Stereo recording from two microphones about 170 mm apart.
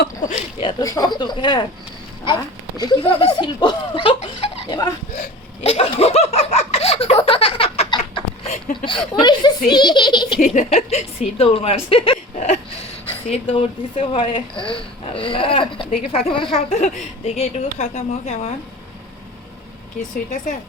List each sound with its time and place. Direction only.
0.6 s a child's voice: 25° left (ahead or behind)
5.6 s laughter: 35° left (ahead or behind)
8.7 s a child's voice: 30° left (ahead or behind)
10.4 s speech: 45° left (ahead or behind)
16.6 s speech: 55° left (ahead or behind)
17.2 s speech: 40° left (ahead or behind)